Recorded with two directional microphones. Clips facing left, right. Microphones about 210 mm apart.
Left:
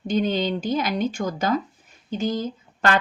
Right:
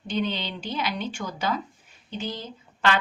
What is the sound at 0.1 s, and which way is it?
A woman's voice, 45° left (ahead or behind).